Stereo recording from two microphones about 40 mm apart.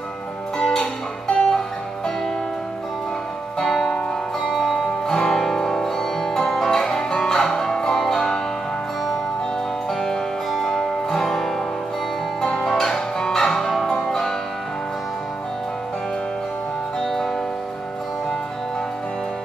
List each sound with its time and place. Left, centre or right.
0.6 s music: centre
3.5 s music: centre
10.6 s music: centre
17.0 s music: centre